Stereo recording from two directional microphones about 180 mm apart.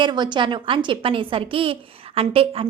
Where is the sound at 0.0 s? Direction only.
25° right (ahead or behind).